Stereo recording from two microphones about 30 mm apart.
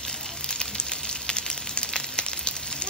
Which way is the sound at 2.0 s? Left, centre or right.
Left.